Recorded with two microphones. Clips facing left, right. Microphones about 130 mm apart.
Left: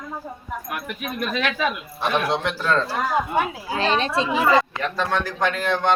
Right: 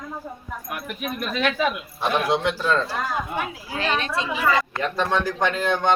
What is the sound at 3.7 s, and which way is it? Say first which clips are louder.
Speech: left 3 dB; 30° left (ahead or behind).